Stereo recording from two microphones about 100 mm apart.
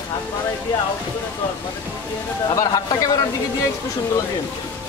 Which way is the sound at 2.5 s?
35° left (ahead or behind).